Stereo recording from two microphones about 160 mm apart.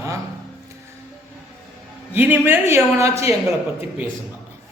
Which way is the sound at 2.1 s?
10° right (ahead or behind).